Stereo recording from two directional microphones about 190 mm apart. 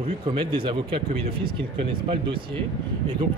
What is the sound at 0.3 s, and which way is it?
Speech, 25° right (ahead or behind).